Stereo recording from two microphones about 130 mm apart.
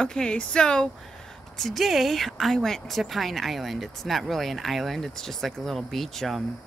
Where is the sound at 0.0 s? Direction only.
5° left (ahead or behind).